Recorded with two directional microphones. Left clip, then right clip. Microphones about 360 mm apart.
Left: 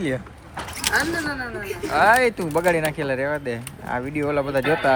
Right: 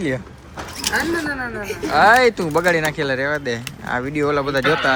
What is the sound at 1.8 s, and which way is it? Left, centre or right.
Speech, centre.